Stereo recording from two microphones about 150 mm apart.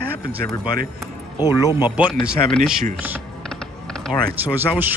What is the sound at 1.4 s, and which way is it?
Speech, 25° left (ahead or behind).